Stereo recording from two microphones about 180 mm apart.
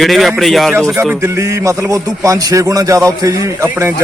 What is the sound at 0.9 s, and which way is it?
A man's voice, 10° right (ahead or behind).